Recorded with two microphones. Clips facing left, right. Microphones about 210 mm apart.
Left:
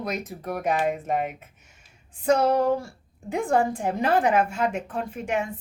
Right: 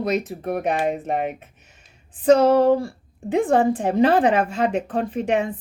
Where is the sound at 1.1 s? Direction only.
65° right (ahead or behind).